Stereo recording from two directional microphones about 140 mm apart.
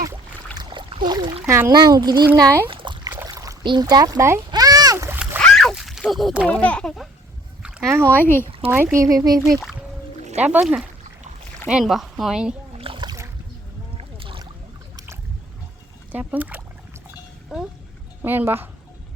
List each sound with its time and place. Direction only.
0.5 s a sound: 30° right (ahead or behind)
1.5 s a child's voice: 20° right (ahead or behind)
2.6 s a sound: 35° right (ahead or behind); by 5.2 s 20° right (ahead or behind)
5.4 s a sound: 5° left (ahead or behind)
6.5 s a child's voice: 10° left (ahead or behind)
8.0 s a child's voice: 15° left (ahead or behind)
8.7 s a child's voice: 15° right (ahead or behind)
10.3 s a woman's voice: 10° right (ahead or behind)
12.7 s splash: 40° right (ahead or behind)
13.9 s boat: 40° right (ahead or behind)
14.9 s boat: 20° right (ahead or behind)
16.1 s speech: 10° right (ahead or behind)
18.2 s speech: 15° right (ahead or behind)